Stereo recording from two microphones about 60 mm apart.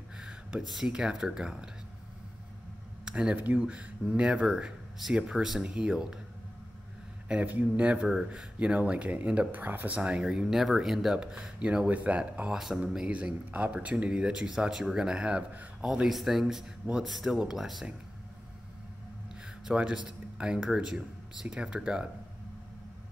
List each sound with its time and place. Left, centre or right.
0.2 s a sound: centre
0.7 s speech: centre
3.1 s speech: centre
7.2 s speech: right
9.9 s speech: centre
12.4 s speech: centre
12.9 s speech: centre
19.8 s speech: centre